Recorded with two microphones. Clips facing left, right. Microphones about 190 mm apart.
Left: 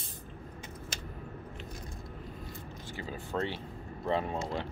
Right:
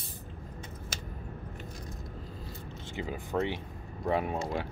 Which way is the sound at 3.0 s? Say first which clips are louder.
Right 3 dB; 15° right (ahead or behind).